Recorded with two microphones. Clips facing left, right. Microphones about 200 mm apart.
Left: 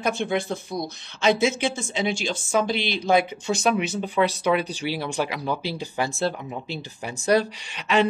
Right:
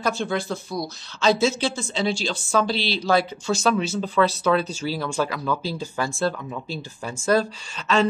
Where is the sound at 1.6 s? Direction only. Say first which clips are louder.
Right 1 dB; 15° left (ahead or behind).